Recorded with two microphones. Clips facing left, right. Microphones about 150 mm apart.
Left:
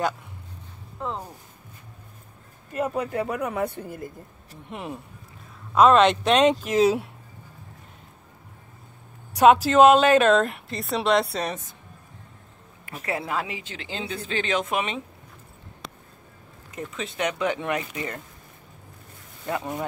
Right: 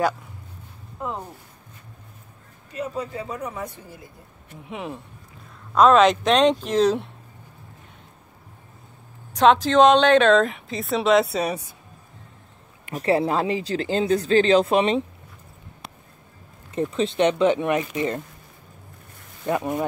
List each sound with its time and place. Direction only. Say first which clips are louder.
1.0 s speech: right 1 dB; 15° right (ahead or behind)
2.7 s speech: left 3 dB; 55° left (ahead or behind)
4.6 s a woman's voice: right 2 dB; centre (ahead or behind)
9.3 s a woman's voice: even; 10° left (ahead or behind); by 11.7 s 10° right (ahead or behind)
12.9 s speech: right 8 dB; 35° right (ahead or behind)
16.7 s speech: right 10 dB; 30° right (ahead or behind)
19.4 s speech: right 5 dB; 20° right (ahead or behind)